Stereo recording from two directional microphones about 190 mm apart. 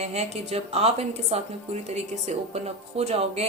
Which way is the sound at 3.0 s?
35° right (ahead or behind).